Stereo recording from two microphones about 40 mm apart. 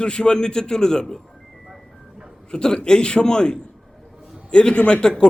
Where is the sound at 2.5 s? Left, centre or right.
Left.